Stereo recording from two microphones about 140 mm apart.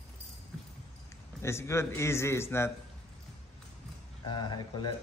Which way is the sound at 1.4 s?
20° left (ahead or behind).